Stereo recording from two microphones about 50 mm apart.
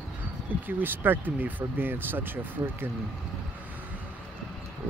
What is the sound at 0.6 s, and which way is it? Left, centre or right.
Speech, right.